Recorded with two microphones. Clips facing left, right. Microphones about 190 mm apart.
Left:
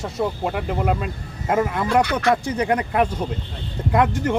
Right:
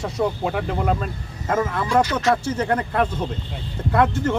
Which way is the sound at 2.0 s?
60° left (ahead or behind).